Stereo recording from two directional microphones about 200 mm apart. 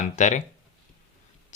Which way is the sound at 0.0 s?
40° left (ahead or behind).